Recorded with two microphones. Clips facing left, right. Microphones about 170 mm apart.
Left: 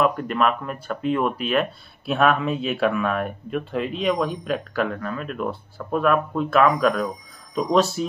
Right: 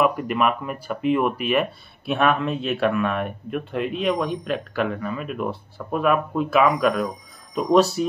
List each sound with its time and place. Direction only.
0.0 s speech: 5° right (ahead or behind)